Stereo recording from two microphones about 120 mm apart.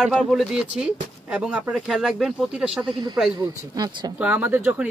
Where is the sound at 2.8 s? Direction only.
40° right (ahead or behind).